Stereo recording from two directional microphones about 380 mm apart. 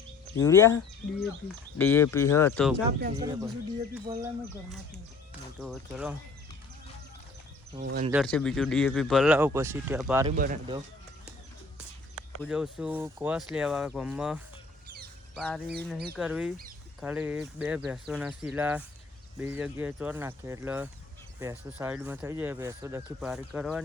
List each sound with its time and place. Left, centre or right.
0.3 s speech: centre
1.8 s speech: centre
3.2 s speech: centre
5.3 s speech: centre
7.8 s speech: right
8.1 s speech: centre
10.2 s speech: right
12.4 s speech: centre